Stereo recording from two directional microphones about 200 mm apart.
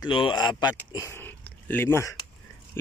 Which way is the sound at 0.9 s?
15° left (ahead or behind).